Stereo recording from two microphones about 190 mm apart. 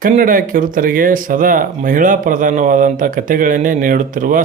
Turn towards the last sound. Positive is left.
turn(degrees=-45)  # may be behind; listen again after turning